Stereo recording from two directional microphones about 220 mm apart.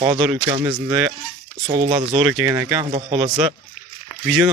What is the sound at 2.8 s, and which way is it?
Speech, 25° right (ahead or behind).